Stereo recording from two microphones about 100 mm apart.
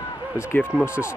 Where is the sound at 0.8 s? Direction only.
25° left (ahead or behind).